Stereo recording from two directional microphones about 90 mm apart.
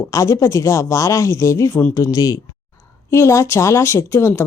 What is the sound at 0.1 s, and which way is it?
Speech, 35° left (ahead or behind).